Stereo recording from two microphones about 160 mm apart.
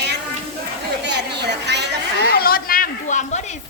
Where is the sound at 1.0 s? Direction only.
90° right.